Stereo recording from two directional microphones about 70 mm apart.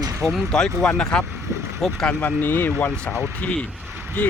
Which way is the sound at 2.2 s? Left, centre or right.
Left.